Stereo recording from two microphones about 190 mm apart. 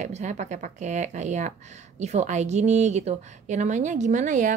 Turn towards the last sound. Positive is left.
turn(degrees=-40)  # may be behind; listen again after turning